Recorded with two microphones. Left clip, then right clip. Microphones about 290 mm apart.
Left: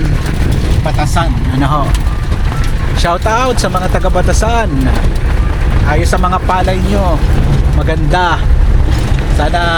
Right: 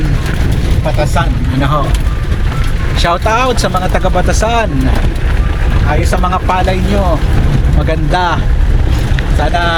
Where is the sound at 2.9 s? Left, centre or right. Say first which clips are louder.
Right 1 dB; centre.